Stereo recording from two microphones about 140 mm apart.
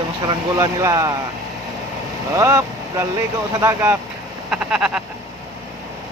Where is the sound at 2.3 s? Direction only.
20° right (ahead or behind).